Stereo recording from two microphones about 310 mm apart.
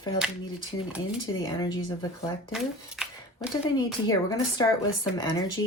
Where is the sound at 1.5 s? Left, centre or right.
Centre.